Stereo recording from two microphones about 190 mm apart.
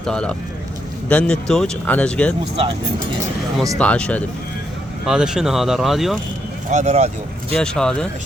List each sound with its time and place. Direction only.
0.0 s speech: 5° left (ahead or behind)
3.8 s speech: 5° left (ahead or behind)
6.7 s speech: 40° right (ahead or behind)
7.5 s speech: 5° left (ahead or behind)